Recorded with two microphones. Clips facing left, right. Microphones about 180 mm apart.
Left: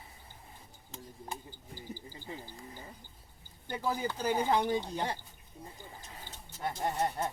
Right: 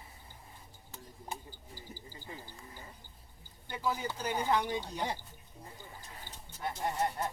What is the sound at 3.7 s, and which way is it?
Speech, 40° left (ahead or behind).